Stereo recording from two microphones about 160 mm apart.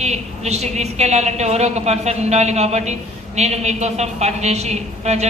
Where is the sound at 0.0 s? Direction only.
45° right (ahead or behind).